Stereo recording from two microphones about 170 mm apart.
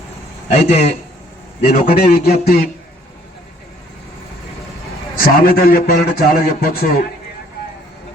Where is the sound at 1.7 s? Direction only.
60° left (ahead or behind).